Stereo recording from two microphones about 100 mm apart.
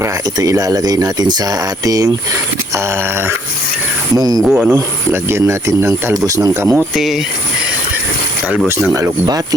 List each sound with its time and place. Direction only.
0.3 s speech: 35° right (ahead or behind)
2.7 s speech: 25° right (ahead or behind)
4.1 s speech: 40° right (ahead or behind)
4.4 s speech: 10° right (ahead or behind)
4.7 s speech: 25° right (ahead or behind)
6.9 s speech: centre (ahead or behind)
8.6 s speech: 25° right (ahead or behind)
9.2 s speech: 40° right (ahead or behind)